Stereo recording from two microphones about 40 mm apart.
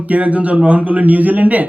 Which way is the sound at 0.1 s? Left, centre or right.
Right.